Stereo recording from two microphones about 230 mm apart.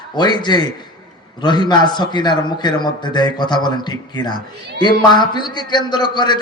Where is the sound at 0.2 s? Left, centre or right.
Centre.